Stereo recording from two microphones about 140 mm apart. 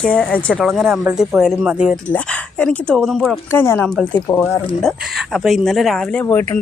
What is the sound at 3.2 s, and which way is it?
Speech, 15° left (ahead or behind).